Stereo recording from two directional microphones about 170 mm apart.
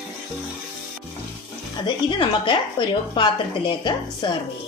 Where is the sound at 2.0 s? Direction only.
30° left (ahead or behind).